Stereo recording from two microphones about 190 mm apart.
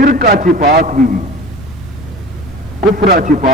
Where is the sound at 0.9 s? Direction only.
45° right (ahead or behind).